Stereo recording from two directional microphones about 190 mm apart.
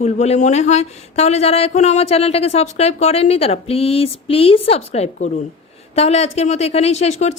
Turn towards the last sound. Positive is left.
turn(degrees=35)  # may be behind; listen again after turning